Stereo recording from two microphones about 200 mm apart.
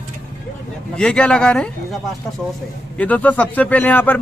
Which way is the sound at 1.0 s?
5° left (ahead or behind).